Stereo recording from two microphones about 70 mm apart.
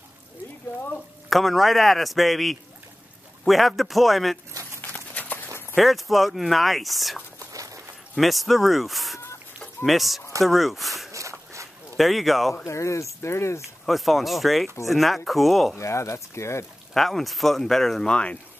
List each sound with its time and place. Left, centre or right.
1.3 s speech: centre
4.8 s clip-clop: left
5.8 s speech: centre
7.3 s a sound: right
8.2 s speech: centre
11.1 s walk: right
12.0 s speech: centre
12.6 s speech: left
13.8 s speech: centre
15.8 s speech: left
16.9 s speech: centre
18.1 s speech: centre